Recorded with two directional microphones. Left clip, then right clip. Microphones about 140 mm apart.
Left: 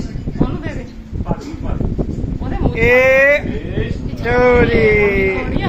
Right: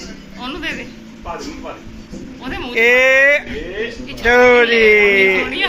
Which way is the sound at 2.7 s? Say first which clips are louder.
Even; centre (ahead or behind).